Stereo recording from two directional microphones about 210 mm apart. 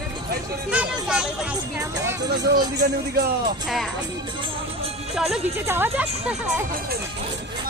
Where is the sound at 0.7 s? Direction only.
5° right (ahead or behind).